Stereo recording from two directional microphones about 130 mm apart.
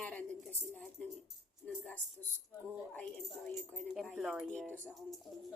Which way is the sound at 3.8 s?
Centre (ahead or behind).